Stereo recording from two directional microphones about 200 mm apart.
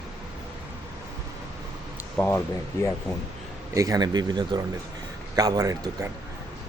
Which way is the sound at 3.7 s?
15° right (ahead or behind).